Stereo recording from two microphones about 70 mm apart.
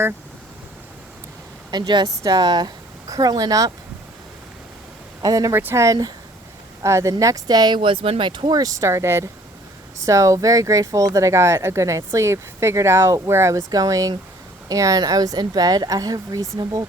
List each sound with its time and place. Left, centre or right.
1.7 s speech: right
2.2 s speech: right
5.2 s speech: right